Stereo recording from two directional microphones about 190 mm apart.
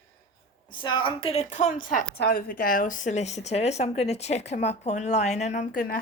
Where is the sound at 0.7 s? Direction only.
25° left (ahead or behind); by 6.0 s 45° left (ahead or behind).